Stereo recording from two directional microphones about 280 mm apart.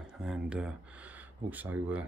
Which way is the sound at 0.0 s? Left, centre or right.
Centre.